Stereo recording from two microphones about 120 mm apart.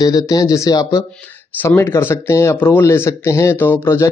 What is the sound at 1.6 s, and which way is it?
A man's voice, 20° left (ahead or behind).